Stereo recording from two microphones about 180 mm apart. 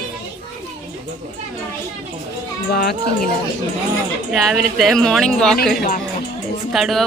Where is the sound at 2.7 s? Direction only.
60° left (ahead or behind).